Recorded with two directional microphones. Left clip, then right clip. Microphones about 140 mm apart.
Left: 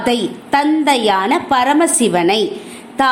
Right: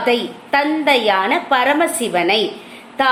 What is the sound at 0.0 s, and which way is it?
A woman's voice, 40° left (ahead or behind).